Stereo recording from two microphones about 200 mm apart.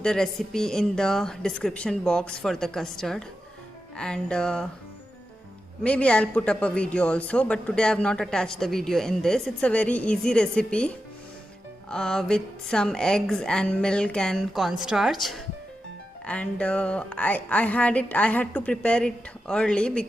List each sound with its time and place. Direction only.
0.0 s a man's voice: 5° left (ahead or behind)
5.8 s a man's voice: 5° left (ahead or behind)